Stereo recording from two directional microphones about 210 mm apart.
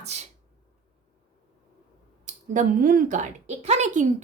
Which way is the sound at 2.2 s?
35° right (ahead or behind).